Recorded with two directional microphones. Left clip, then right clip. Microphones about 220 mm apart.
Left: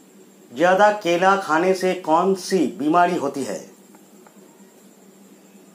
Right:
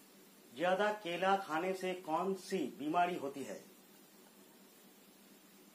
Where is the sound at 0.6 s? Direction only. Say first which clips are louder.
Left 18 dB; 15° left (ahead or behind).